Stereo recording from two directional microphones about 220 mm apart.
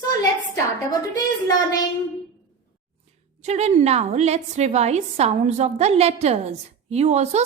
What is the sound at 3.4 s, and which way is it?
A woman's voice, 30° right (ahead or behind).